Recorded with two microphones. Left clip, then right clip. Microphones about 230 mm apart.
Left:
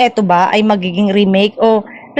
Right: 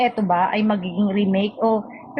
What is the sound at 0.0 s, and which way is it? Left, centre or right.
A woman's voice, left.